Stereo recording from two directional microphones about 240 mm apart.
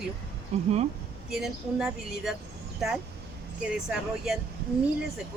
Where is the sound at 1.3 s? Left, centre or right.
Centre.